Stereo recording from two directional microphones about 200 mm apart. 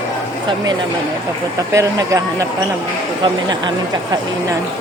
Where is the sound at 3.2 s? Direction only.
20° right (ahead or behind).